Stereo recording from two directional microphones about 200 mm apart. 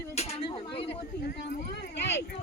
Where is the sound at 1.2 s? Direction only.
45° left (ahead or behind).